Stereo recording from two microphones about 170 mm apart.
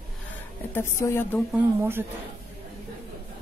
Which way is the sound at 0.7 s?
15° left (ahead or behind).